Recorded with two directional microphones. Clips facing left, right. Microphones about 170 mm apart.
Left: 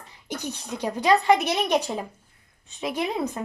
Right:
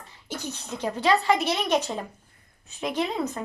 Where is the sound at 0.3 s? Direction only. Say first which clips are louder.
Left 2 dB; 15° left (ahead or behind).